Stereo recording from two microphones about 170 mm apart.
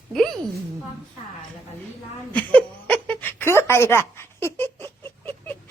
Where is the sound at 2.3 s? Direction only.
10° left (ahead or behind).